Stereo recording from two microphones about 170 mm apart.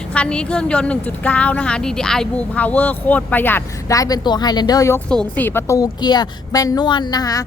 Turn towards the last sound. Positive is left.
turn(degrees=20)  # may be behind; listen again after turning